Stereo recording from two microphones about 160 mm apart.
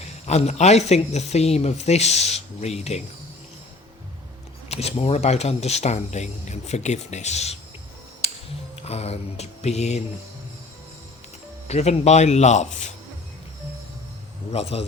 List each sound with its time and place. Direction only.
0.0 s speech: 45° left (ahead or behind)
4.7 s speech: 40° left (ahead or behind)
8.2 s music: 40° left (ahead or behind)
8.8 s speech: 40° left (ahead or behind)
11.7 s speech: 45° left (ahead or behind)
14.5 s a man's voice: 40° left (ahead or behind)